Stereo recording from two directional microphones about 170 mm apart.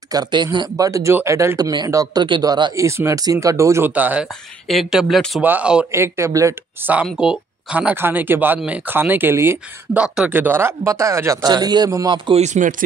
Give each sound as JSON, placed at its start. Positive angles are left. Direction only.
{"t": 0.1, "sound": "speech", "side_deg": -25}
{"t": 12.4, "sound": "speech", "side_deg": -45}